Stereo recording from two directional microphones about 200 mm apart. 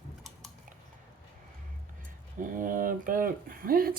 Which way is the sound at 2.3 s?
40° right (ahead or behind).